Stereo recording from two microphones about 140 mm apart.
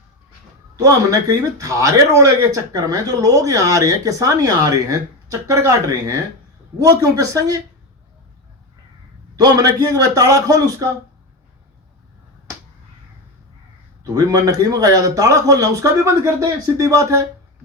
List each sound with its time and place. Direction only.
0.8 s speech: 25° right (ahead or behind)
9.3 s speech: 25° right (ahead or behind)
14.0 s speech: 25° right (ahead or behind)